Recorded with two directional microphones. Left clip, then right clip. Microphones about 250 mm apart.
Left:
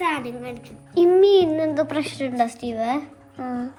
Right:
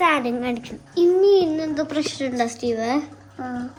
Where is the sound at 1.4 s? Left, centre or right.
Left.